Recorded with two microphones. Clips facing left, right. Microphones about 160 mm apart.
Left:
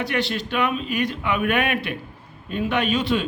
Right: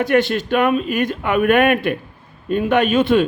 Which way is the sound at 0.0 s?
50° right (ahead or behind).